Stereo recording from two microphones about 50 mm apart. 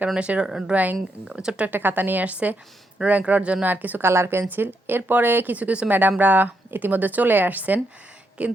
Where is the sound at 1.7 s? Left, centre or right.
Right.